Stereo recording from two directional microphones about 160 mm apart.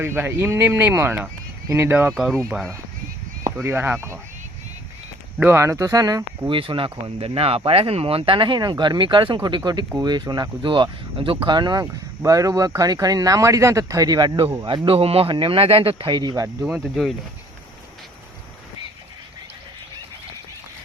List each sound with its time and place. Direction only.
0.0 s speech: 15° right (ahead or behind)
2.5 s speech: centre (ahead or behind)
3.6 s speech: 15° right (ahead or behind)
5.4 s speech: 15° right (ahead or behind)
6.6 s speech: 30° right (ahead or behind)
14.8 s speech: 35° right (ahead or behind)
16.9 s speech: centre (ahead or behind)